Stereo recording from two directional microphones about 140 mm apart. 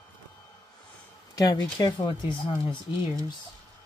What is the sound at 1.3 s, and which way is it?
Speech, 30° left (ahead or behind).